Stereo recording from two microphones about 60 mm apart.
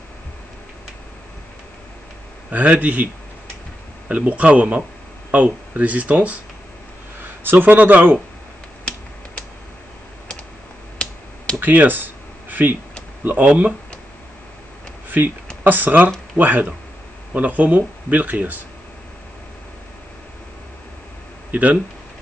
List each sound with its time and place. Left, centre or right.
2.5 s speech: right
4.1 s speech: right
7.4 s speech: right
11.6 s a sound: right
13.2 s speech: right
15.0 s speech: right
21.5 s speech: right